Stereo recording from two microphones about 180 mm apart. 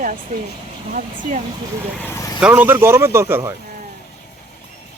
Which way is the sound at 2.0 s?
15° left (ahead or behind).